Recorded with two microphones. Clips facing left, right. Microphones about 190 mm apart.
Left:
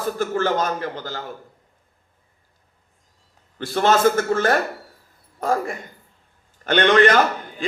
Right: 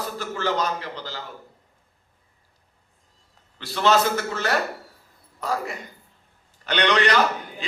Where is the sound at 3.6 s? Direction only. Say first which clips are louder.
Left 3 dB; 50° left (ahead or behind).